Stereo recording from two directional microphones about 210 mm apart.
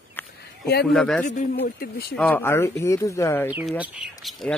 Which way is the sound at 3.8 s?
Centre (ahead or behind).